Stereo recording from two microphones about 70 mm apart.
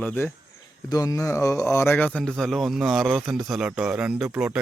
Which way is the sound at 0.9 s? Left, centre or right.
Left.